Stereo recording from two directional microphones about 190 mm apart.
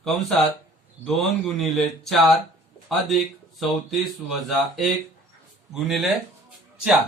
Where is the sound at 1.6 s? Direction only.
Centre (ahead or behind).